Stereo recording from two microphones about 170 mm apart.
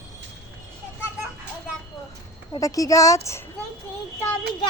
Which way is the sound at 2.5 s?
20° left (ahead or behind).